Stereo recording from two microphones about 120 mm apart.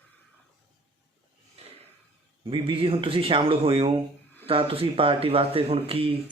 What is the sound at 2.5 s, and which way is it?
Speech, 45° right (ahead or behind).